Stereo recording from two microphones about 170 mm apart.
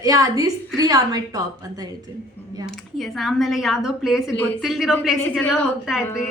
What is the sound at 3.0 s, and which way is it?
A woman's voice, centre (ahead or behind).